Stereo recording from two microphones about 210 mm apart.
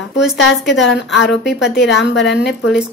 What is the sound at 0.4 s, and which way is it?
A woman's voice, 60° left (ahead or behind).